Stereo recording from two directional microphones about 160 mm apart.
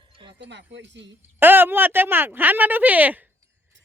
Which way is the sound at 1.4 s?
15° right (ahead or behind).